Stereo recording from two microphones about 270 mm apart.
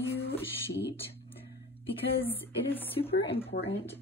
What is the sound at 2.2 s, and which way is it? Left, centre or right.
Speech, centre.